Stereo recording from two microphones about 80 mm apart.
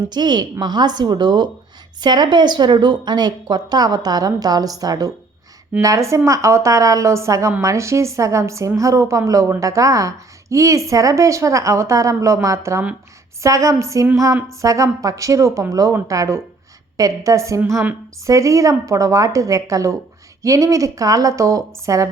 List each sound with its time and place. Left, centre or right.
0.1 s a woman's voice: right